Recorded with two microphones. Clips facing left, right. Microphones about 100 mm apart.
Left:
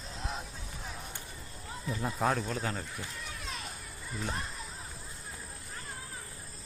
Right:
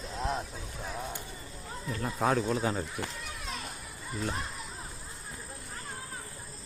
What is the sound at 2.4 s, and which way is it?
Speech, 15° right (ahead or behind).